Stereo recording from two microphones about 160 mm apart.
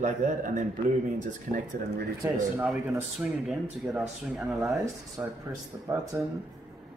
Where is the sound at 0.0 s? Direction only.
55° right (ahead or behind).